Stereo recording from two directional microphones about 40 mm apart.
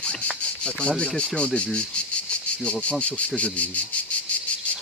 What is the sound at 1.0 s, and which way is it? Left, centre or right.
Speech, left.